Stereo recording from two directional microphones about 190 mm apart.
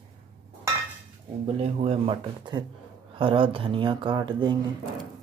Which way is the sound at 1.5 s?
35° right (ahead or behind).